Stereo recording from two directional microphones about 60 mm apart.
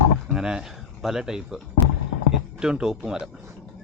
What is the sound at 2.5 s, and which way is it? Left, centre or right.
Speech, centre.